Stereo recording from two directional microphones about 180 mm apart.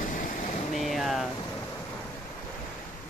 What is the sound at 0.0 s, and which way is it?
Air conditioning, 45° left (ahead or behind).